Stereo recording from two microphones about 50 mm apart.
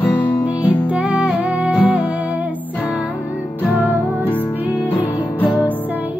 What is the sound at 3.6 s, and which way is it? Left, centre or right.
Music, left.